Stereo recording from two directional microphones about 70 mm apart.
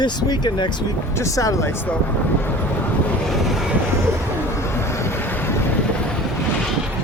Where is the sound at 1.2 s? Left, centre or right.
Left.